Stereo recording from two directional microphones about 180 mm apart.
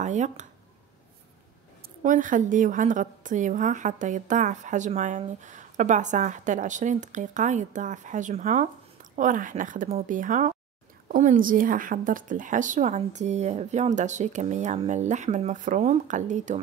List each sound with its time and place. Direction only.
0.0 s a woman's voice: 40° right (ahead or behind)
2.0 s a woman's voice: 45° right (ahead or behind)